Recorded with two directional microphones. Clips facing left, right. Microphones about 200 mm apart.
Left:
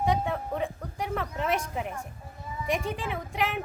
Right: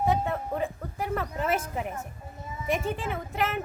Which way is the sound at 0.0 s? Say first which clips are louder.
Right 1 dB; centre (ahead or behind).